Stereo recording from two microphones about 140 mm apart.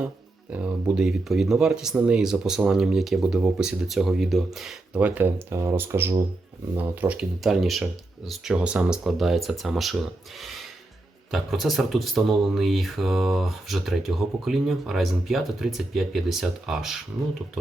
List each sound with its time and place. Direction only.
0.5 s speech: 10° right (ahead or behind)
4.9 s speech: 15° right (ahead or behind)